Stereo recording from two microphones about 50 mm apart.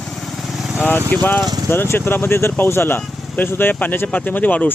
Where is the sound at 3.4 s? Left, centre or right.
Left.